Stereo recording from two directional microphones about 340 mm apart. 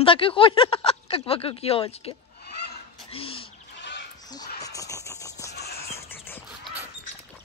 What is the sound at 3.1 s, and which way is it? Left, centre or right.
Bird, centre.